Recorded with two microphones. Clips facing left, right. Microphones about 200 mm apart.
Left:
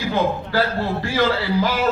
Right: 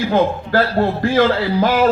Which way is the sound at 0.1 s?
50° right (ahead or behind).